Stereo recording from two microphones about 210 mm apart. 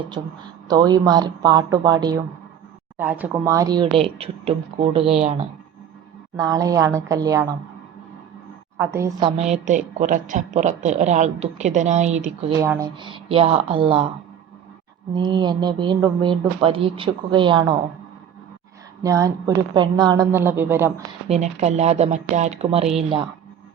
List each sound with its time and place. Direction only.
0.1 s speech: 20° right (ahead or behind)
6.3 s speech: 15° right (ahead or behind)
8.8 s speech: 15° right (ahead or behind)
9.4 s a woman's voice: 35° right (ahead or behind)
12.5 s speech: 15° right (ahead or behind)
15.1 s speech: 20° right (ahead or behind)
19.0 s speech: 15° right (ahead or behind)
21.2 s a woman's voice: 30° right (ahead or behind)